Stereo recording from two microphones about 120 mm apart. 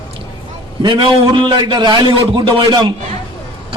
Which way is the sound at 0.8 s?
40° right (ahead or behind).